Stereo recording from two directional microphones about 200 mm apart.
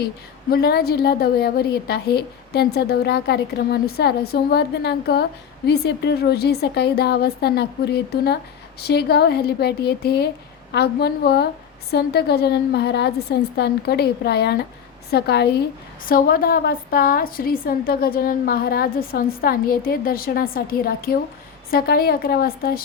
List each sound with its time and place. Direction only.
0.5 s a woman's voice: 50° left (ahead or behind)